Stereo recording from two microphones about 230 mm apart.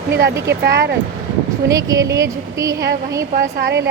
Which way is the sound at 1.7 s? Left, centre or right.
Centre.